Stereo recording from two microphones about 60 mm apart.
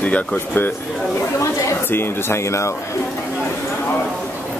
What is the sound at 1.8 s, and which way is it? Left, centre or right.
Speech, left.